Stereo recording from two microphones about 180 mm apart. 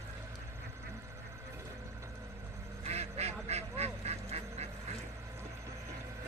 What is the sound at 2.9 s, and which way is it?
Quack, 35° right (ahead or behind).